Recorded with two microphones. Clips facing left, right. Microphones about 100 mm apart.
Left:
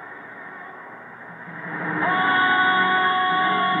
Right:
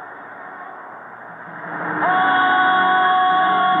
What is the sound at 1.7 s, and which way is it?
Train, 40° right (ahead or behind).